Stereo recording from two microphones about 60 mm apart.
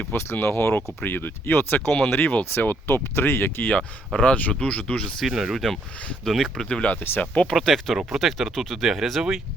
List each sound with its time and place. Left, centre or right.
0.3 s speech: left
4.1 s speech: centre
5.2 s speech: centre
6.7 s speech: centre
7.5 s speech: centre